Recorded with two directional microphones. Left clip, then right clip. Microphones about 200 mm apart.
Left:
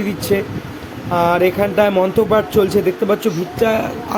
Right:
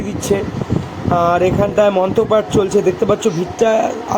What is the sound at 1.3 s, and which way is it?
Speech, 5° left (ahead or behind).